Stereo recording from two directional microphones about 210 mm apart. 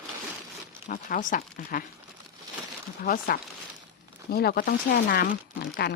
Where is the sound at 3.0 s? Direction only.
45° left (ahead or behind).